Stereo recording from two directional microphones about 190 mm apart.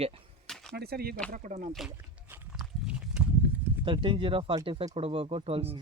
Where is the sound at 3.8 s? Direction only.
25° right (ahead or behind).